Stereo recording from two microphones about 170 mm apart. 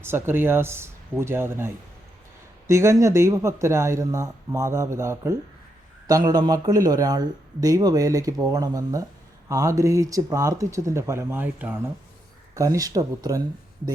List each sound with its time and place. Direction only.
0.0 s a man's voice: 15° right (ahead or behind)